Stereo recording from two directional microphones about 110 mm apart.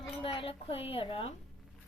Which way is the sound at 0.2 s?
55° left (ahead or behind).